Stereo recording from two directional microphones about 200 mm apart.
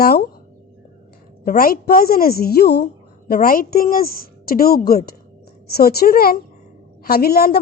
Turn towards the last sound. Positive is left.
turn(degrees=50)  # may be behind; listen again after turning